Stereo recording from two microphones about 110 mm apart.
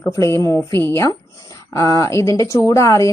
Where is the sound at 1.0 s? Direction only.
35° left (ahead or behind).